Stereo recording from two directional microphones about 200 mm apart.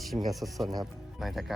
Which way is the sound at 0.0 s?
Centre (ahead or behind).